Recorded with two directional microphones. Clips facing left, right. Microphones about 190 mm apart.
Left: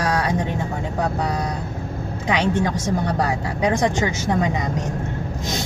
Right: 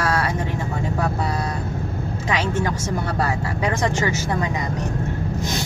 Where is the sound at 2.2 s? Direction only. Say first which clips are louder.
Left 3 dB; 20° left (ahead or behind).